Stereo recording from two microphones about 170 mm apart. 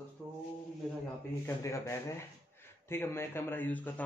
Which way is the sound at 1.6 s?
15° left (ahead or behind).